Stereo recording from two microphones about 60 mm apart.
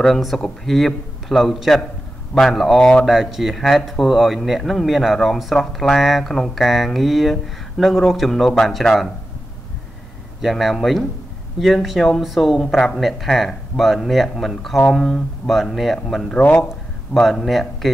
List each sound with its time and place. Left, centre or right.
0.0 s speech: centre
10.4 s speech: centre
16.3 s speech: left
17.1 s speech: centre